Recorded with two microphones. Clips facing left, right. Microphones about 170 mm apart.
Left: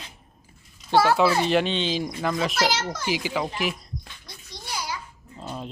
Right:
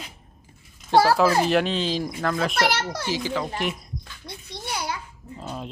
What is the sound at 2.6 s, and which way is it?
Speech, 60° right (ahead or behind).